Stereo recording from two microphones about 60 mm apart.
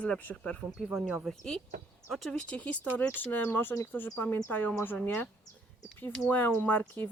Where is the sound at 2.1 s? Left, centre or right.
Centre.